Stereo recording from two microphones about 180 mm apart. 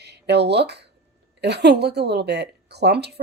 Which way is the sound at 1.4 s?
70° right (ahead or behind).